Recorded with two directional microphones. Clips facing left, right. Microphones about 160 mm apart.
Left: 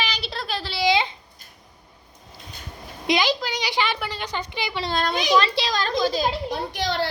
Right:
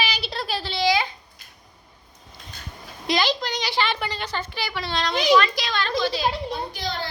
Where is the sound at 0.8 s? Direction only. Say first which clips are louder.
Left 1 dB; 20° left (ahead or behind).